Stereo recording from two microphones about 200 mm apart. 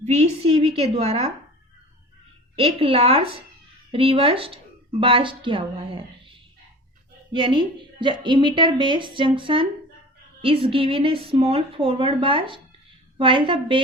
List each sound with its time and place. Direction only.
0.0 s a woman's voice: 30° right (ahead or behind)
2.6 s a woman's voice: 25° right (ahead or behind)
7.3 s a woman's voice: 25° right (ahead or behind)